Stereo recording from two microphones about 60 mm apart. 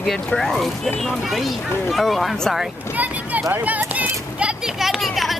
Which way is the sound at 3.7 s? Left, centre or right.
Right.